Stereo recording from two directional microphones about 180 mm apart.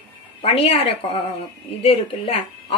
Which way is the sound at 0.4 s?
35° left (ahead or behind).